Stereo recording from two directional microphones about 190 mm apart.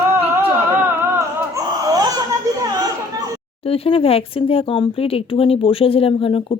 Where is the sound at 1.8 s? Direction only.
20° right (ahead or behind).